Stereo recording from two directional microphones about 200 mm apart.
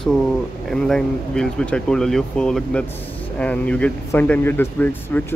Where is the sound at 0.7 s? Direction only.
5° left (ahead or behind).